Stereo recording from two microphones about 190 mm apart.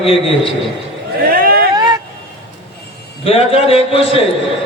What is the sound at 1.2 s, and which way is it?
Vehicle, 50° right (ahead or behind).